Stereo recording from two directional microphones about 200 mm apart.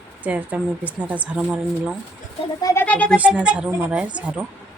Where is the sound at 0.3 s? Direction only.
5° right (ahead or behind).